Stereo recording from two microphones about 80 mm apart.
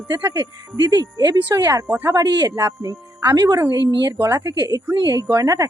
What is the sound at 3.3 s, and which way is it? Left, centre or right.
A woman's voice, right.